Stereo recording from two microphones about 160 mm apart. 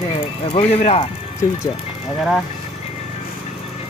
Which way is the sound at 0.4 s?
40° left (ahead or behind).